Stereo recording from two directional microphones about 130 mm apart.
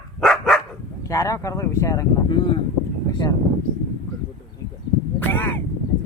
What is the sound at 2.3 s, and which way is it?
Speech, 35° left (ahead or behind).